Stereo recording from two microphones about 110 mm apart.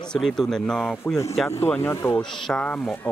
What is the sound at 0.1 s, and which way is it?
Speech, 5° left (ahead or behind).